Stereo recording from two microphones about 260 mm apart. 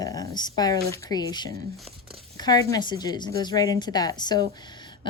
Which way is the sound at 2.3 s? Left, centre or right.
Centre.